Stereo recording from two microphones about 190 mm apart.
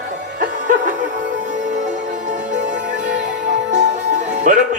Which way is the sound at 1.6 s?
40° right (ahead or behind).